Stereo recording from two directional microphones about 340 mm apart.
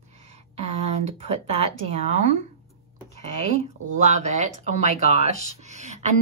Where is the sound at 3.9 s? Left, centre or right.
Right.